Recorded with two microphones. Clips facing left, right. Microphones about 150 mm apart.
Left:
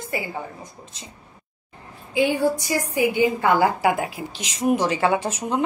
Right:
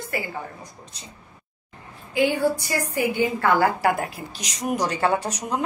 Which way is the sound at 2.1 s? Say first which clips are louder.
Left 1 dB; 15° left (ahead or behind).